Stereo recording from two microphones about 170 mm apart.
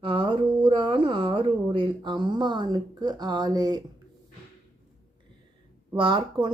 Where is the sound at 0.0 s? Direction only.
30° right (ahead or behind).